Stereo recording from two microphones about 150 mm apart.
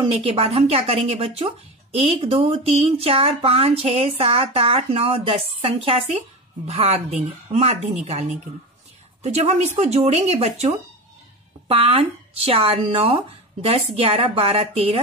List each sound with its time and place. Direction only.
0.1 s a woman's voice: 40° right (ahead or behind)